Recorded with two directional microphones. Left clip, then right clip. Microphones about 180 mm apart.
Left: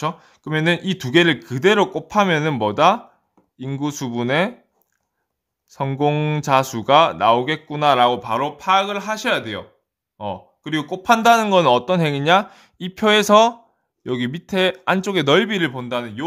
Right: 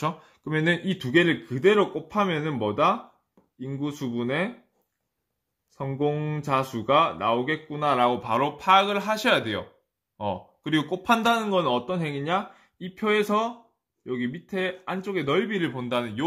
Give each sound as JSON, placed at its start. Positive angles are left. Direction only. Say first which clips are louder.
{"t": 0.0, "sound": "speech", "louder": "left 4 dB", "side_deg": 20}
{"t": 5.7, "sound": "speech", "louder": "left 7 dB", "side_deg": 45}
{"t": 8.3, "sound": "speech", "louder": "left 2 dB", "side_deg": 10}
{"t": 11.4, "sound": "speech", "louder": "left 9 dB", "side_deg": 45}
{"t": 15.9, "sound": "a man's voice", "louder": "left 2 dB", "side_deg": 10}